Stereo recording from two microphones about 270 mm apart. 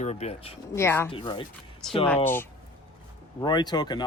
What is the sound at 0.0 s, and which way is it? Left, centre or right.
Speech, left.